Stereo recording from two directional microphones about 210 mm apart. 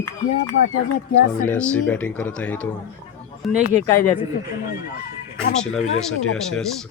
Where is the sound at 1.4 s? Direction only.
5° left (ahead or behind).